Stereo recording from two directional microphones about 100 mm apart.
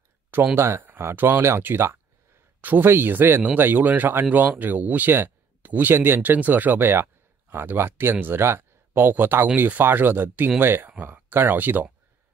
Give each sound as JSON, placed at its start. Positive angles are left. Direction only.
{"t": 0.6, "sound": "speech", "side_deg": -25}